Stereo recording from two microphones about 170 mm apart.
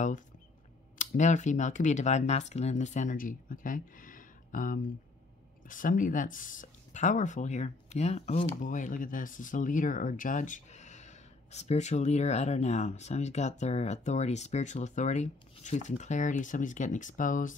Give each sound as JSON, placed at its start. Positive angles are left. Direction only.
{"t": 0.9, "sound": "speech", "side_deg": 45}
{"t": 8.5, "sound": "speech", "side_deg": 50}